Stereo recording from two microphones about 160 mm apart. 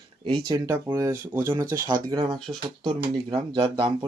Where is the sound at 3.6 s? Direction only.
30° right (ahead or behind).